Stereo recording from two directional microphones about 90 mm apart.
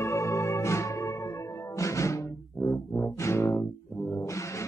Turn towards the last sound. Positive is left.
turn(degrees=30)  # may be behind; listen again after turning